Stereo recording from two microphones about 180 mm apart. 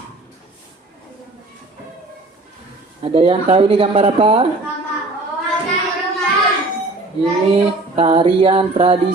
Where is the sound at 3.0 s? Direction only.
30° right (ahead or behind).